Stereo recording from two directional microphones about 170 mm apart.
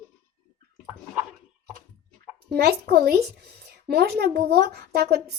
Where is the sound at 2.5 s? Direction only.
65° right (ahead or behind).